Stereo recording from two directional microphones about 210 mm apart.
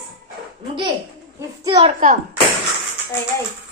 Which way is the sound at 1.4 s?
20° right (ahead or behind).